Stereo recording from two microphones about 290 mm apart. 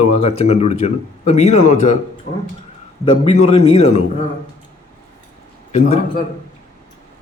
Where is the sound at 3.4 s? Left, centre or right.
Left.